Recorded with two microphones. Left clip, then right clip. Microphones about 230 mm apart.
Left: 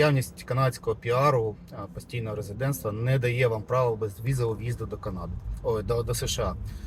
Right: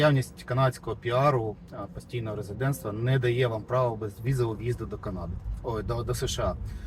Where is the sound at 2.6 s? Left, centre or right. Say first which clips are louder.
Left 1 dB; centre.